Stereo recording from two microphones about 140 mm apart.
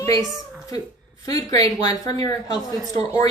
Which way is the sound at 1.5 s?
25° left (ahead or behind).